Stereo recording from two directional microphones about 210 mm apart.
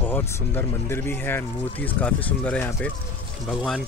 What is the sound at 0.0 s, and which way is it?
Speech, 10° left (ahead or behind).